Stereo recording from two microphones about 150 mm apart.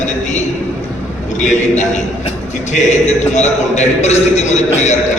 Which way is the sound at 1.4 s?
55° left (ahead or behind).